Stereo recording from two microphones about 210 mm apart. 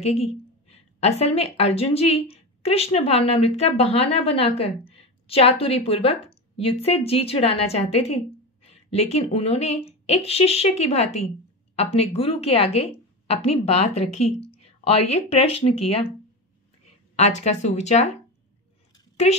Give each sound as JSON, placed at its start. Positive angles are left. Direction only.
{"t": 0.0, "sound": "a woman's voice", "side_deg": 30}
{"t": 17.1, "sound": "speech", "side_deg": 30}